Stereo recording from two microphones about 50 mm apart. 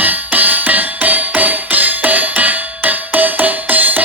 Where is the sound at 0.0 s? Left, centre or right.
Right.